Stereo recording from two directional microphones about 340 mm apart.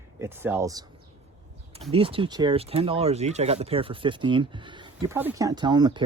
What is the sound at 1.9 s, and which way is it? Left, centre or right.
Speech, centre.